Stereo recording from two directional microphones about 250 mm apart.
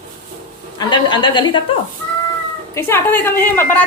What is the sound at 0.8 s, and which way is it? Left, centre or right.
Speech, centre.